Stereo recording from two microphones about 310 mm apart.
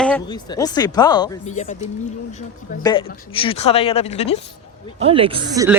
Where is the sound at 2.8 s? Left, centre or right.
Centre.